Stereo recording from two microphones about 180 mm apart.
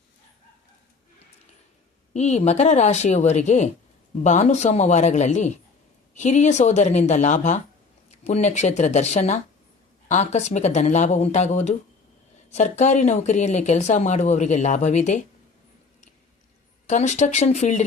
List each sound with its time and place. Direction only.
2.1 s speech: 40° left (ahead or behind)
16.8 s speech: 40° left (ahead or behind)